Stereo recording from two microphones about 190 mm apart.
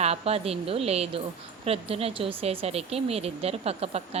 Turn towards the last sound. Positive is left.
turn(degrees=-35)  # may be behind; listen again after turning